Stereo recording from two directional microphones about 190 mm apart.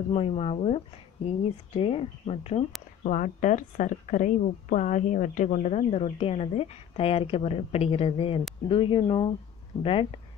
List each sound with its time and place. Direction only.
0.1 s a woman's voice: 30° left (ahead or behind)
3.0 s a woman's voice: 40° left (ahead or behind); by 9.3 s 25° left (ahead or behind)